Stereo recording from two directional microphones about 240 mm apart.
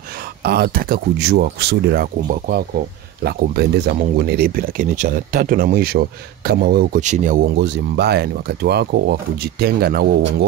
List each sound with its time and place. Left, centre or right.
0.2 s speech: right